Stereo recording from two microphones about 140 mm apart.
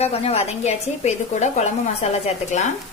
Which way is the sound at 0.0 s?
45° left (ahead or behind).